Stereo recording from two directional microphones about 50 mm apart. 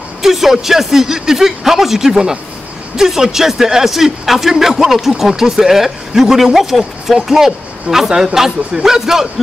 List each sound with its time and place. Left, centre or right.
0.2 s a man's voice: centre